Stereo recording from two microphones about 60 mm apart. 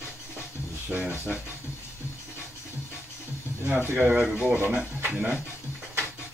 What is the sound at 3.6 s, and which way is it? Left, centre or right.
Speech, right.